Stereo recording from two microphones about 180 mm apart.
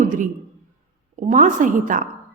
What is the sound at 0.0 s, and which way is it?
A man's voice, 45° right (ahead or behind).